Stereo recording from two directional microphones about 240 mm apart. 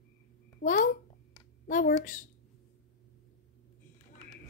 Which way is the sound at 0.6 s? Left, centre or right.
Left.